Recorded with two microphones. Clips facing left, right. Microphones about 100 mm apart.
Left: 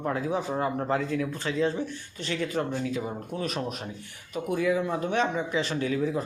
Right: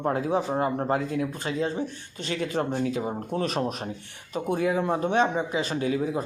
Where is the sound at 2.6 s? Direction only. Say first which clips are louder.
Right 3 dB; 50° right (ahead or behind).